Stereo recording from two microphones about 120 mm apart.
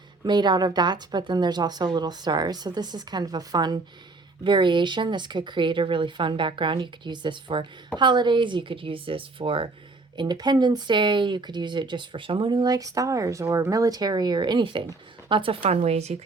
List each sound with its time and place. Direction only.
0.3 s a woman's voice: 35° right (ahead or behind)
10.2 s a woman's voice: 35° right (ahead or behind); by 16.1 s 65° right (ahead or behind)